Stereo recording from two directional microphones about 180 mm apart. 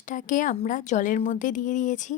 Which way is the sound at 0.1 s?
45° left (ahead or behind).